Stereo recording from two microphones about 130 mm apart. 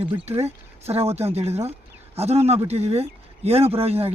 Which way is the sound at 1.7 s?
50° right (ahead or behind).